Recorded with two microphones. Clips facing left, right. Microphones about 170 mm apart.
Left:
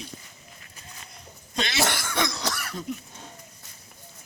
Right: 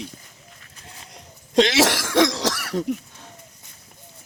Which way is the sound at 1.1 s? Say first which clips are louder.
Right 14 dB; 90° right.